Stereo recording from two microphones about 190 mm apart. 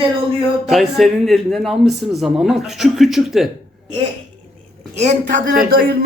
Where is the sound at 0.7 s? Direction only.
Centre (ahead or behind).